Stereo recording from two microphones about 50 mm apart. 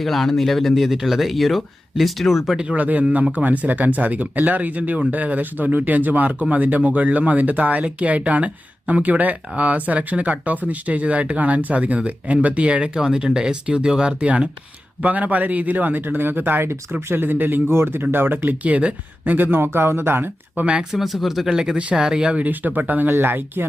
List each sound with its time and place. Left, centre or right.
0.0 s speech: centre
2.7 s speech: right
18.6 s speech: right
20.7 s speech: right
21.0 s speech: centre
21.5 s speech: centre
22.4 s speech: right